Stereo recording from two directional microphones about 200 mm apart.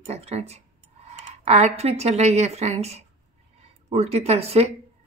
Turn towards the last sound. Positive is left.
turn(degrees=-30)  # may be behind; listen again after turning